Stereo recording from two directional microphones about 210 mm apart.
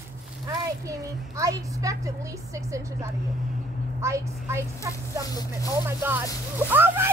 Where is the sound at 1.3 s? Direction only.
15° right (ahead or behind).